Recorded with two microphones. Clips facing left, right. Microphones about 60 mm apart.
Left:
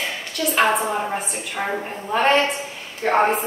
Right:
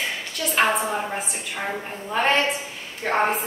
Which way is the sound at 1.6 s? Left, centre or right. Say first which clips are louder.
Left 4 dB; left.